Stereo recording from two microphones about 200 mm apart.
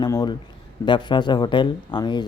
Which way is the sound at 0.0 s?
20° left (ahead or behind).